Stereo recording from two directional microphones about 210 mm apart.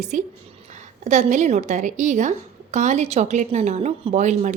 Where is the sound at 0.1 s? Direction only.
35° right (ahead or behind).